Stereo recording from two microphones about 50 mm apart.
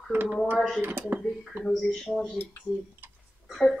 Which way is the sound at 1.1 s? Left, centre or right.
Right.